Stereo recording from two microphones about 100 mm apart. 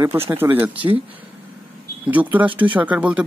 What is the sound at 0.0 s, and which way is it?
Speech, 25° right (ahead or behind).